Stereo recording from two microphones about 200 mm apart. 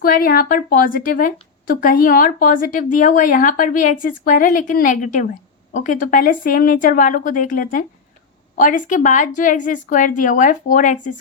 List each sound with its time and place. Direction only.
0.0 s a woman's voice: 45° left (ahead or behind)